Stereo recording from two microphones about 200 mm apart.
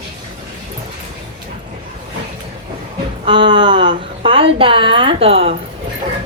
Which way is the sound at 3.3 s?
25° right (ahead or behind).